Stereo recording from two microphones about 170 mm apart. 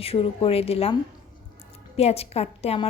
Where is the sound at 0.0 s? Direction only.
35° left (ahead or behind).